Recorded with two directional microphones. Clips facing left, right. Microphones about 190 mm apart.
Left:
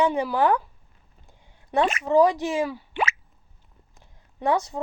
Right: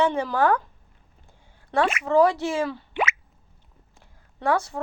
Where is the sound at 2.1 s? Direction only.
15° left (ahead or behind).